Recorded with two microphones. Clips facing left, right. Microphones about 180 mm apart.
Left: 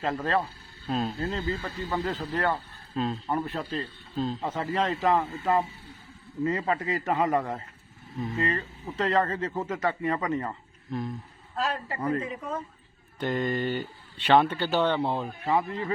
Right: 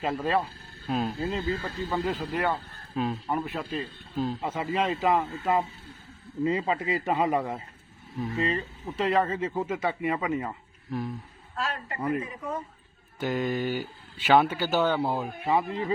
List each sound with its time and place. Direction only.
0.0 s speech: 15° right (ahead or behind)
11.5 s a man's voice: 35° left (ahead or behind)
11.9 s speech: 5° right (ahead or behind)
15.4 s speech: 15° right (ahead or behind)